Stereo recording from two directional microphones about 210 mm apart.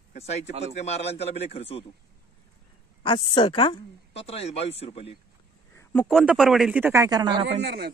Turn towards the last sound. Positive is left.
turn(degrees=-50)  # may be behind; listen again after turning